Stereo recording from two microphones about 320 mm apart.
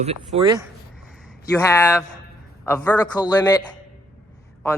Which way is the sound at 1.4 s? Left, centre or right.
Centre.